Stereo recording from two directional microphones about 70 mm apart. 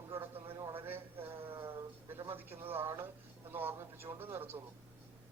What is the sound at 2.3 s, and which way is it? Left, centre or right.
Speech, right.